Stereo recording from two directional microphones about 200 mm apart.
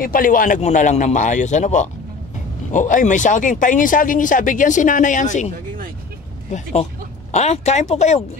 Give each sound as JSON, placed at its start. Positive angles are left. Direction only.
{"t": 0.0, "sound": "speech", "side_deg": 45}
{"t": 6.5, "sound": "speech", "side_deg": 35}